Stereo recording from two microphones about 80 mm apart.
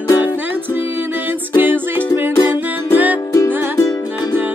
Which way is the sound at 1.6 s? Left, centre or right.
Right.